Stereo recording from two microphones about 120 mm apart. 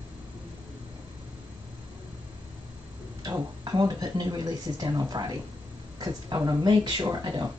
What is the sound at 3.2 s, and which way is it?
Speech, 35° right (ahead or behind).